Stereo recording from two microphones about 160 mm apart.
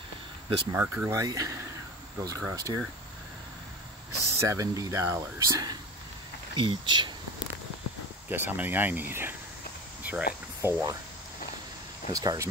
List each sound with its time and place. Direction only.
0.7 s speech: 15° right (ahead or behind)
4.4 s speech: 20° right (ahead or behind)
8.3 s speech: 10° right (ahead or behind)
10.0 s a sound: 10° right (ahead or behind)
10.6 s speech: 10° right (ahead or behind)
12.1 s speech: 25° right (ahead or behind)